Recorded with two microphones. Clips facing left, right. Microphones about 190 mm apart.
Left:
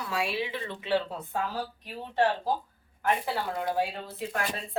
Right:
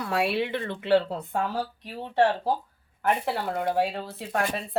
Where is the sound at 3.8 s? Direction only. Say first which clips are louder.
Right 3 dB; 65° right (ahead or behind).